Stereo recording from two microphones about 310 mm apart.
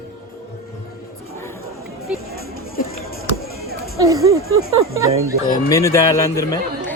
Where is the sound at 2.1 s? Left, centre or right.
Centre.